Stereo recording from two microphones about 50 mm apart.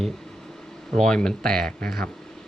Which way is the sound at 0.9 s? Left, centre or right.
Centre.